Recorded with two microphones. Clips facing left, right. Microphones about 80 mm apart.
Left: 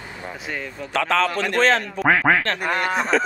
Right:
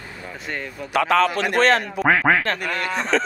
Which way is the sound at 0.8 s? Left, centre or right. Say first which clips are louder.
Right 3 dB; centre.